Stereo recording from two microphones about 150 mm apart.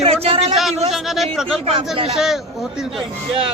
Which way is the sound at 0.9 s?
Centre (ahead or behind).